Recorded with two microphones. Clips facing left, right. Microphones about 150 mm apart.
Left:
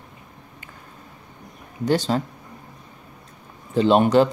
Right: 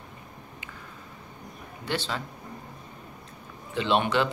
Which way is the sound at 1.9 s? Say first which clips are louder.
Left 10 dB; 40° left (ahead or behind).